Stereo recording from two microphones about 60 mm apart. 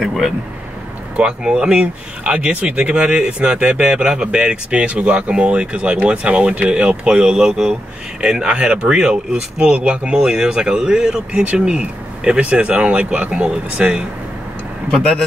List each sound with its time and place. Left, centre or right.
0.0 s speech: centre
1.1 s speech: centre